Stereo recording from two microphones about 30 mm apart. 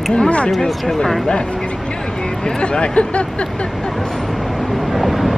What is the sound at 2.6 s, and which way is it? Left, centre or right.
Speech, left.